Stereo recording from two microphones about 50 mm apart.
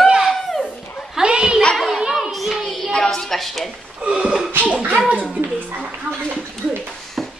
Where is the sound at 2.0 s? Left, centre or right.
Centre.